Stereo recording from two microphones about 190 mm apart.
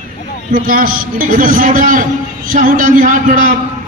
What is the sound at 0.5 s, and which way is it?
A man's voice, 50° right (ahead or behind).